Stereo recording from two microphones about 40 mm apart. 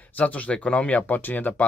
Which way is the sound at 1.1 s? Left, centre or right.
Left.